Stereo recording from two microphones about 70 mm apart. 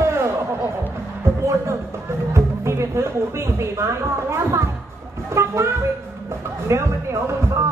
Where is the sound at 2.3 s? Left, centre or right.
Right.